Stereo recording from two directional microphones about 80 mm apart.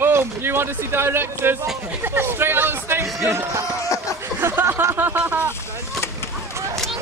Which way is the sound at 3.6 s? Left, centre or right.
Left.